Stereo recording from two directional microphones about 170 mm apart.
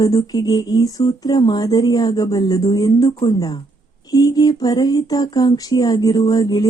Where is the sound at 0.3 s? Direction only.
20° left (ahead or behind).